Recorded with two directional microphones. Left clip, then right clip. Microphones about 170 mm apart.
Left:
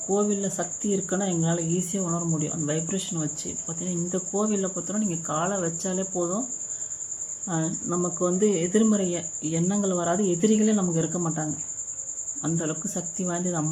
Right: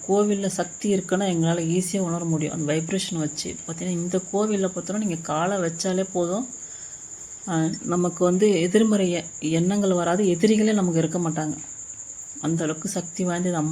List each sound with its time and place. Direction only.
0.1 s speech: 15° right (ahead or behind)
7.4 s speech: 15° right (ahead or behind)